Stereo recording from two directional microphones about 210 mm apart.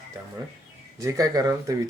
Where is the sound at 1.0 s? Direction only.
15° right (ahead or behind).